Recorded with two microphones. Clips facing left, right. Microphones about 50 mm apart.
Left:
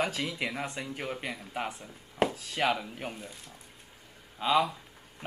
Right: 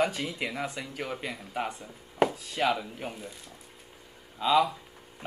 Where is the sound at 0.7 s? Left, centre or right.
Centre.